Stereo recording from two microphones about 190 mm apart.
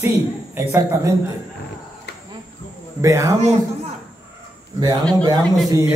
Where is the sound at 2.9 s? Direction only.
15° right (ahead or behind).